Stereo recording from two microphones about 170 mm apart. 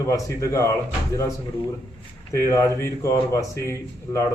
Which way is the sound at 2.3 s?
20° left (ahead or behind).